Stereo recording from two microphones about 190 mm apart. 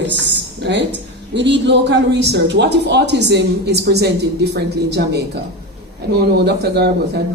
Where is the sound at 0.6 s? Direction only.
65° right (ahead or behind).